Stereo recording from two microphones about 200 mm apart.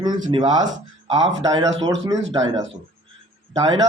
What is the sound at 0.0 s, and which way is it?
Speech, 20° right (ahead or behind).